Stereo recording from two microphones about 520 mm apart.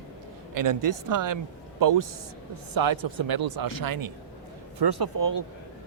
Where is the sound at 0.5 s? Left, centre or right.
Right.